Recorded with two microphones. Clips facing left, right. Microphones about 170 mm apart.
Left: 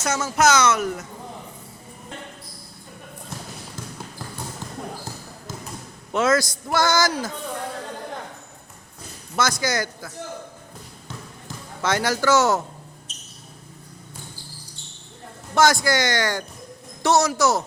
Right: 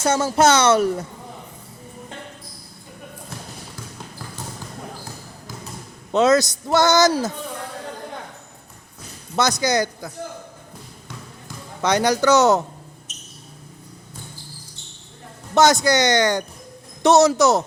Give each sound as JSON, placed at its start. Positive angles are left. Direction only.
{"t": 0.0, "sound": "a man's voice", "side_deg": -30}
{"t": 6.1, "sound": "a man's voice", "side_deg": -20}
{"t": 9.3, "sound": "a man's voice", "side_deg": -20}
{"t": 11.8, "sound": "a man's voice", "side_deg": -20}
{"t": 15.5, "sound": "a man's voice", "side_deg": -20}